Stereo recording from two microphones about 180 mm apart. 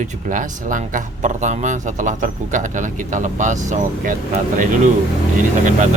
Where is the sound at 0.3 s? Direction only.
45° right (ahead or behind).